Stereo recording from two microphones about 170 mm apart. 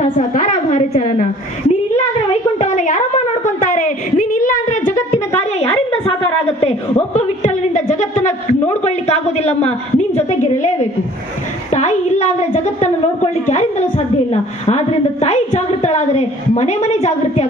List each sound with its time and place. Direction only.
0.0 s a woman's voice: 50° left (ahead or behind)
2.6 s a sound: 45° left (ahead or behind)
6.6 s a woman's voice: 35° left (ahead or behind)